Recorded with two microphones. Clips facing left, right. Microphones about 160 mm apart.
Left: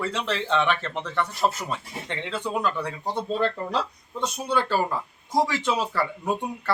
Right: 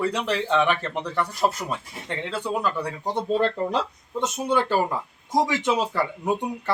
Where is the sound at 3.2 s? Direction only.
20° right (ahead or behind).